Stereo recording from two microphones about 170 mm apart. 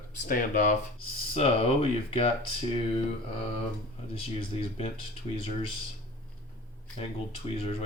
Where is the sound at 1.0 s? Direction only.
35° left (ahead or behind).